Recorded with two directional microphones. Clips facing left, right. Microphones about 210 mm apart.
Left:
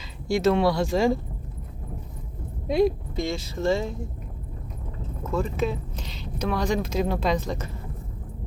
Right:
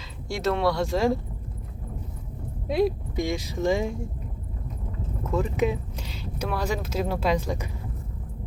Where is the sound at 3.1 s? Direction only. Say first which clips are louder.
Right 1 dB; 15° right (ahead or behind).